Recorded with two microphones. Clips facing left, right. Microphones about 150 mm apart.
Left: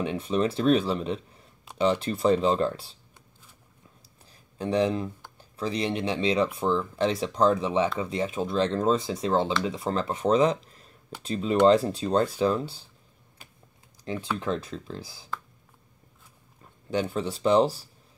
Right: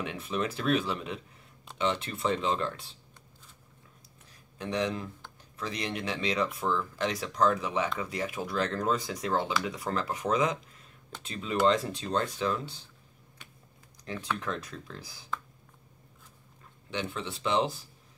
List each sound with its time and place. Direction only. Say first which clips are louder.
0.0 s speech: left 7 dB; 30° left (ahead or behind)
4.3 s a sound: left 7 dB; 30° left (ahead or behind)
5.4 s speech: left 7 dB; 30° left (ahead or behind)
14.1 s speech: left 5 dB; 30° left (ahead or behind)
16.9 s speech: left 7 dB; 40° left (ahead or behind)